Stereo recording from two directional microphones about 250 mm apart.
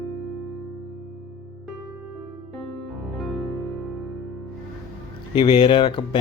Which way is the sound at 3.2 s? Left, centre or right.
Centre.